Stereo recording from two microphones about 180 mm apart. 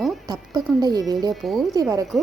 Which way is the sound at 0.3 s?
20° right (ahead or behind).